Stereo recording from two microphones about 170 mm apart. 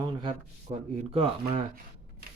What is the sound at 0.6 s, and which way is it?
Speech, 40° right (ahead or behind).